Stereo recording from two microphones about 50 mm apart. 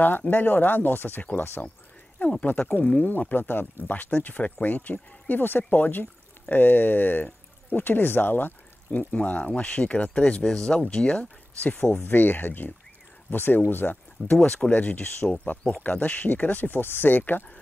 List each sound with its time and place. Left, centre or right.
0.3 s speech: left
1.4 s speech: left
2.1 s speech: left
2.4 s speech: left
2.8 s speech: left
3.3 s speech: left
9.1 s speech: left
12.0 s speech: left